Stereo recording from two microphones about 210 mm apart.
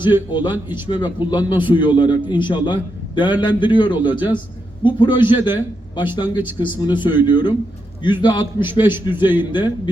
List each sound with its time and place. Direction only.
0.0 s a man's voice: 20° left (ahead or behind)